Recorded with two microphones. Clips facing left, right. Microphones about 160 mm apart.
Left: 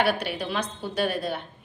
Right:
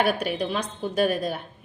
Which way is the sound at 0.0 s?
45° right (ahead or behind).